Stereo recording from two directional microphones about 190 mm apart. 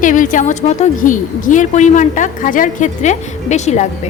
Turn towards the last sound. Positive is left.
turn(degrees=35)  # may be behind; listen again after turning